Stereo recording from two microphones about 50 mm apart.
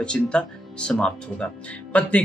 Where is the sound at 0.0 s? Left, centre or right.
Left.